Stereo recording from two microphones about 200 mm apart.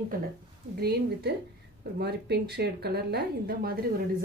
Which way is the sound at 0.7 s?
55° right (ahead or behind).